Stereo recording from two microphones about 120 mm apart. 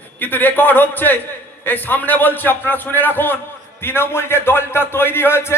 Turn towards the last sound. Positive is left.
turn(degrees=20)  # may be behind; listen again after turning